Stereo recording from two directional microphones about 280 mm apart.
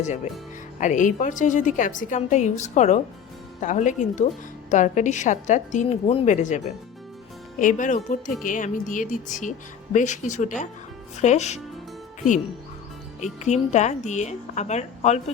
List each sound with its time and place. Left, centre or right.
0.8 s a woman's voice: left
13.4 s a woman's voice: left